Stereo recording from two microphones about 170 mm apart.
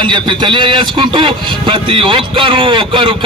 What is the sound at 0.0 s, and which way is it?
A man's voice, 30° right (ahead or behind).